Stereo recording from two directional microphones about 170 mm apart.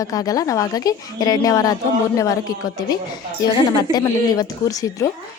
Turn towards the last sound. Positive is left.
turn(degrees=20)  # may be behind; listen again after turning